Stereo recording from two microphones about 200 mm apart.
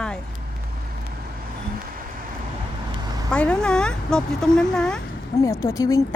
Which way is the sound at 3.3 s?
5° left (ahead or behind).